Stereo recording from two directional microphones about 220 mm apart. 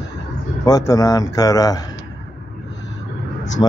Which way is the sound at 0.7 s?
15° left (ahead or behind).